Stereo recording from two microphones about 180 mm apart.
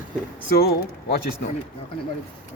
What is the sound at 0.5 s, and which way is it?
Speech, 60° left (ahead or behind).